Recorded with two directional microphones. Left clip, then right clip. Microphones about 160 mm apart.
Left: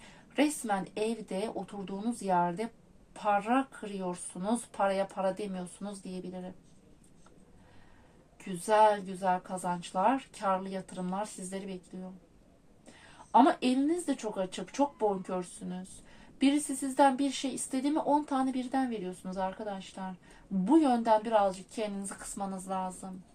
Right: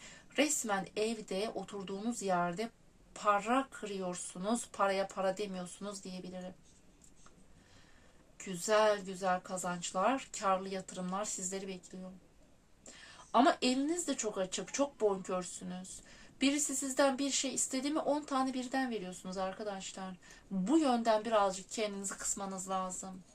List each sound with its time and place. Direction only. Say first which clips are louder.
0.3 s a woman's voice: left 3 dB; 25° right (ahead or behind)
8.4 s a woman's voice: left 5 dB; 20° right (ahead or behind)
13.3 s a woman's voice: left 4 dB; 20° right (ahead or behind)